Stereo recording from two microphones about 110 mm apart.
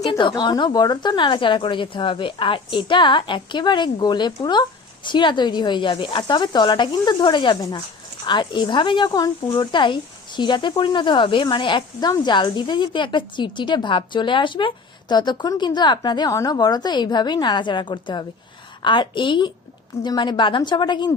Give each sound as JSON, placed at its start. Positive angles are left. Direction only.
{"t": 0.1, "sound": "a woman's voice", "side_deg": 45}
{"t": 16.3, "sound": "a woman's voice", "side_deg": 30}